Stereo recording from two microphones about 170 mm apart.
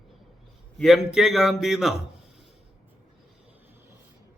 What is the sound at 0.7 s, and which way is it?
A man's voice, centre (ahead or behind).